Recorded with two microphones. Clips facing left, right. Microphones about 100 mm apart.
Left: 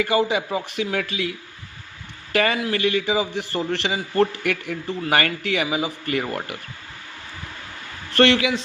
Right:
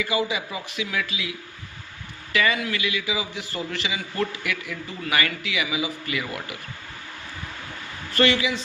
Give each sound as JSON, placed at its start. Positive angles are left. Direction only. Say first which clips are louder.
{"t": 0.0, "sound": "a man's voice", "louder": "left 5 dB", "side_deg": 50}
{"t": 8.1, "sound": "speech", "louder": "left 4 dB", "side_deg": 60}